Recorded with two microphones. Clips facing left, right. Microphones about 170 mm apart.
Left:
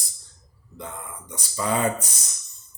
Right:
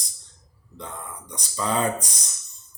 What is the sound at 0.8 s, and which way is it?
Speech, 5° left (ahead or behind).